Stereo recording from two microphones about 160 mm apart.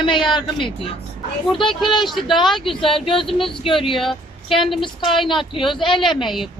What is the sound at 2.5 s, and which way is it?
Speech, centre (ahead or behind).